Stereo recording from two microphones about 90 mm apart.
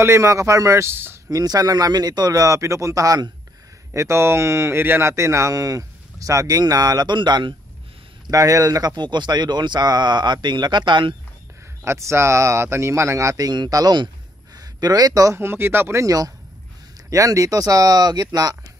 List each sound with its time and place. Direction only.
0.0 s speech: 35° right (ahead or behind)
1.3 s speech: 45° right (ahead or behind)
8.3 s speech: 40° right (ahead or behind); by 11.1 s 60° right (ahead or behind)
11.8 s speech: 30° right (ahead or behind)
15.3 s speech: 25° right (ahead or behind); by 18.6 s 45° right (ahead or behind)